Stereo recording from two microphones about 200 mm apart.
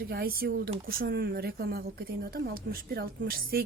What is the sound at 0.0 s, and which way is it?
A woman's voice, 50° right (ahead or behind).